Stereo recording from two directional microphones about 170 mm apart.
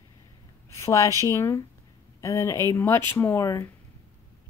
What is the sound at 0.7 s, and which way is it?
A woman's voice, 20° left (ahead or behind).